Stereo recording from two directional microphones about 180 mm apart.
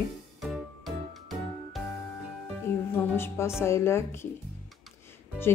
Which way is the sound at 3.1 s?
15° left (ahead or behind).